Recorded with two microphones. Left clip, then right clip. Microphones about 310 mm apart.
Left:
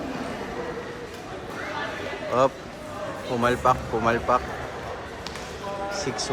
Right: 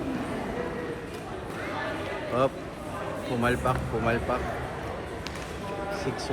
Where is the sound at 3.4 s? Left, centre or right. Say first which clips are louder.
Left 6 dB; left.